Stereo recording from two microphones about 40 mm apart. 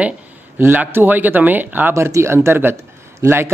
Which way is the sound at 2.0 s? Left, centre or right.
Right.